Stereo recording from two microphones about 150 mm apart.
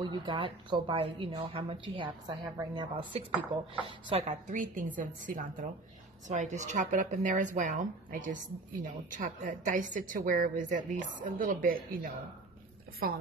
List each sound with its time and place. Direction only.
0.0 s a woman's voice: 30° right (ahead or behind)
4.1 s speech: 45° right (ahead or behind); by 12.1 s 70° right (ahead or behind)